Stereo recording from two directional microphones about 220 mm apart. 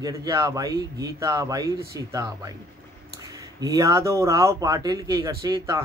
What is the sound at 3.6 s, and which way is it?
Speech, 15° right (ahead or behind).